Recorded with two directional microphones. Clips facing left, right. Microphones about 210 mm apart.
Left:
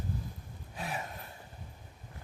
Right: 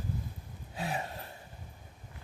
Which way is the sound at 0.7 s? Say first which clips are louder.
Right 3 dB; 30° right (ahead or behind).